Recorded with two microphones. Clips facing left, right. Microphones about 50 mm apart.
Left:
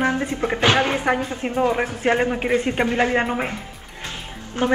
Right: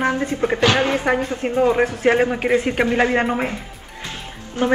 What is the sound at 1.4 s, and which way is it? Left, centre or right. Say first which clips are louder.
A woman's voice: right 4 dB; centre.